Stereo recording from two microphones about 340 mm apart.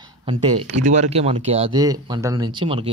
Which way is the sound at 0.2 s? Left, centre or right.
Centre.